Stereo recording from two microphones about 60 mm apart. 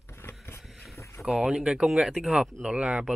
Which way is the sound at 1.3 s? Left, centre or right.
Centre.